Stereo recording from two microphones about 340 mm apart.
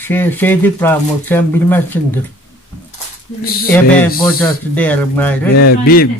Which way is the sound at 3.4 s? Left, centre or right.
Left.